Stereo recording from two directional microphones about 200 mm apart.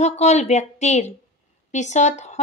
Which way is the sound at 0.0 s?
35° left (ahead or behind).